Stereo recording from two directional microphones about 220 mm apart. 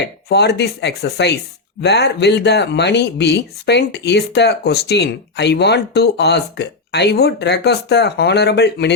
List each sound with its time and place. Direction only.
0.3 s speech: 50° left (ahead or behind)